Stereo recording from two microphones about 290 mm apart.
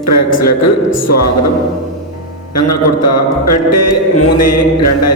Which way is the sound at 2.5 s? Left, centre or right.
Left.